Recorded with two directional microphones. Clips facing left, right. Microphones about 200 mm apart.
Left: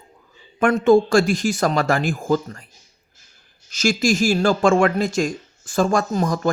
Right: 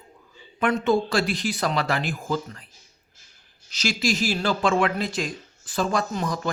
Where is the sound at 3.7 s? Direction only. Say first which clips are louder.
Left 6 dB; 45° left (ahead or behind).